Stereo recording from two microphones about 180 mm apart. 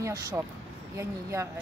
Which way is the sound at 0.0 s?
20° right (ahead or behind).